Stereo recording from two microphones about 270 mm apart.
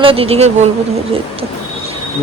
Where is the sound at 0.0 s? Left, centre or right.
Centre.